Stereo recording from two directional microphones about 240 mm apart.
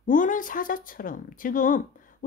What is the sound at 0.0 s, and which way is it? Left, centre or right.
Speech, left.